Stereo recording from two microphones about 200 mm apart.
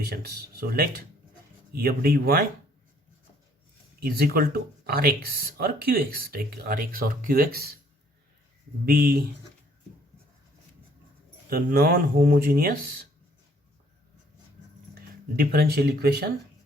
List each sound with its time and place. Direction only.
0.1 s speech: 50° right (ahead or behind)
4.0 s speech: 50° right (ahead or behind)
8.9 s speech: 45° right (ahead or behind)
11.4 s speech: 50° right (ahead or behind)
15.4 s speech: 50° right (ahead or behind)